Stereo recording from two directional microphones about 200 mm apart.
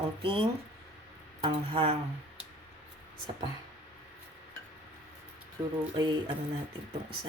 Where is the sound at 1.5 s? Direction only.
30° right (ahead or behind).